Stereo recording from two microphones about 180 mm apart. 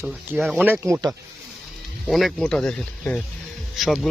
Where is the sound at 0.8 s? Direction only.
15° right (ahead or behind).